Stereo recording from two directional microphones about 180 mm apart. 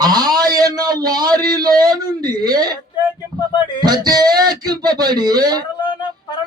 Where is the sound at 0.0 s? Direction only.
20° right (ahead or behind).